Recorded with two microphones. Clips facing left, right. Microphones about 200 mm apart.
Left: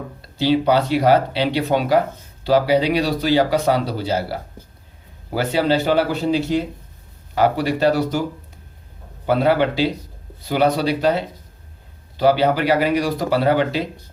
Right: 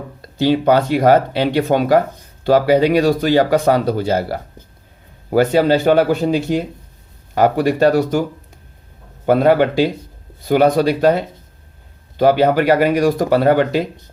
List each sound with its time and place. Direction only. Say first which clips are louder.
0.2 s speech: right 2 dB; 50° right (ahead or behind)
9.2 s speech: right 4 dB; 50° right (ahead or behind)